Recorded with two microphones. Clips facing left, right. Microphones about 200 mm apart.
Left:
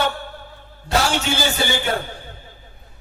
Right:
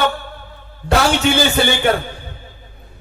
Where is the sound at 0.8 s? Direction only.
60° right (ahead or behind).